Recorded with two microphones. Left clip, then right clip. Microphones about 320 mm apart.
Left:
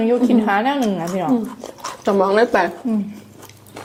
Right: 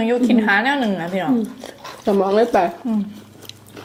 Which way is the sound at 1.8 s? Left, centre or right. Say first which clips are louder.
Left 1 dB; left.